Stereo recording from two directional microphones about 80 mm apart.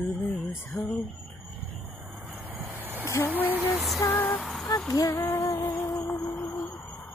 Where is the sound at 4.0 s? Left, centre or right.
Centre.